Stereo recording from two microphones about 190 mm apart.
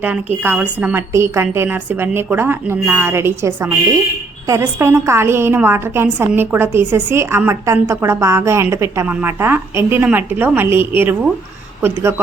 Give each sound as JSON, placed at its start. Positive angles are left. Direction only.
{"t": 0.0, "sound": "a woman's voice", "side_deg": -10}